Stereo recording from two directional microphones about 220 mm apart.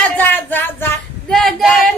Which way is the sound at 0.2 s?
10° left (ahead or behind).